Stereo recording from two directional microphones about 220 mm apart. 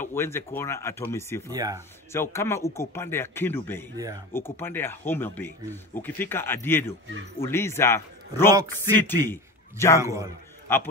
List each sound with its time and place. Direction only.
0.0 s speech: 10° left (ahead or behind)
1.5 s a man's voice: 15° right (ahead or behind)
2.3 s speech: 10° left (ahead or behind)
3.9 s a man's voice: 15° right (ahead or behind)
4.3 s speech: 10° left (ahead or behind)
8.5 s a man's voice: 15° right (ahead or behind)
8.9 s a man's voice: 10° left (ahead or behind)